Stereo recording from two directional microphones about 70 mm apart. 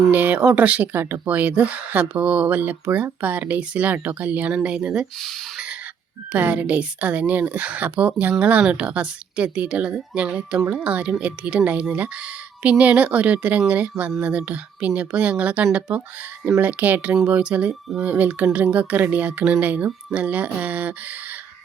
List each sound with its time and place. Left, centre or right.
0.1 s speech: right
6.3 s a woman's voice: centre